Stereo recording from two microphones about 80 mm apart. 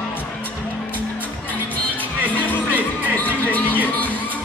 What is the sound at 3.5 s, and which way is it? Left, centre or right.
Music, left.